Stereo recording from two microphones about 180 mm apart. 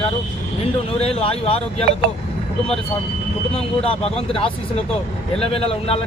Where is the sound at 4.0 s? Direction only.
35° left (ahead or behind).